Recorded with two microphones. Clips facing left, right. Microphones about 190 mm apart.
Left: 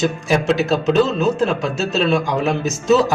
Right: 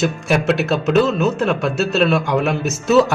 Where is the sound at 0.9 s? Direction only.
35° left (ahead or behind).